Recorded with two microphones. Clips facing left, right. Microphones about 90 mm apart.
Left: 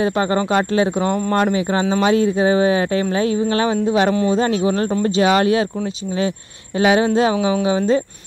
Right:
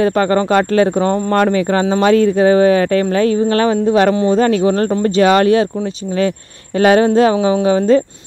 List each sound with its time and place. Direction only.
0.0 s a man's voice: 45° right (ahead or behind); by 4.4 s 30° right (ahead or behind)
4.4 s speech: 50° right (ahead or behind)
6.8 s speech: 45° right (ahead or behind)